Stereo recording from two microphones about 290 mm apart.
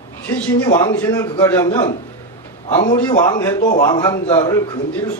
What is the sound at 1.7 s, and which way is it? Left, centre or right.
A man's voice, centre.